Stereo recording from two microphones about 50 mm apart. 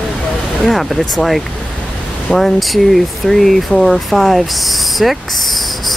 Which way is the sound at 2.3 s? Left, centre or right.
Centre.